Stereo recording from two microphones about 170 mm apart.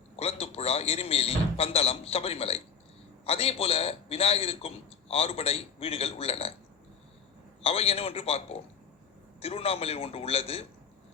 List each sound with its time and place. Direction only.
0.2 s a man's voice: 35° left (ahead or behind)
7.6 s a man's voice: 35° left (ahead or behind)